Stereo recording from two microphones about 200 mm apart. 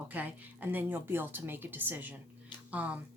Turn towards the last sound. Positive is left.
turn(degrees=-10)  # may be behind; listen again after turning